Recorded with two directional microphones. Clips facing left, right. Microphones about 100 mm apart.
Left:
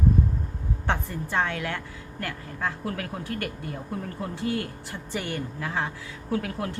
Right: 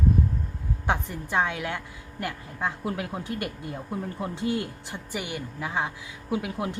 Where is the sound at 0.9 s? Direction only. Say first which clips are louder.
Right 1 dB; 15° right (ahead or behind).